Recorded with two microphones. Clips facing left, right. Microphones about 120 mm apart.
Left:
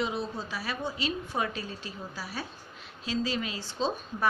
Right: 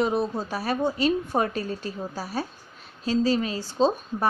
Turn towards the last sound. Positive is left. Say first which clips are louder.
# right 8 dB
turn(degrees=-40)  # may be behind; listen again after turning